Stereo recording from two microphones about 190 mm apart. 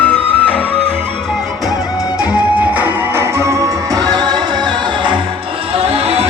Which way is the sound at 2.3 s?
5° right (ahead or behind).